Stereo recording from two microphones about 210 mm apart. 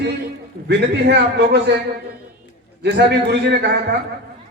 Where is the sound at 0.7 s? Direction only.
55° right (ahead or behind).